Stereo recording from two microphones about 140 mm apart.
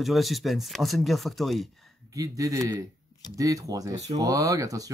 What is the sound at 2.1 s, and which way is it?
Speech, 25° right (ahead or behind).